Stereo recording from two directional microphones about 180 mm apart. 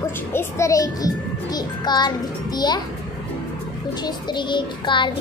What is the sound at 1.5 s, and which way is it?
Music, 25° left (ahead or behind).